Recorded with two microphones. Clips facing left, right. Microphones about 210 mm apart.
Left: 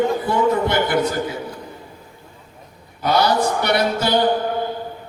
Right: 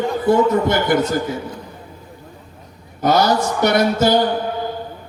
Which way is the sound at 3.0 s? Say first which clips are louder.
Right 2 dB; 45° right (ahead or behind).